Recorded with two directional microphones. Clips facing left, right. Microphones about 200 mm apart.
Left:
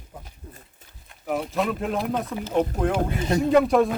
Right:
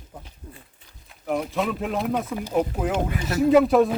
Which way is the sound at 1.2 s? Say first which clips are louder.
Even; centre (ahead or behind).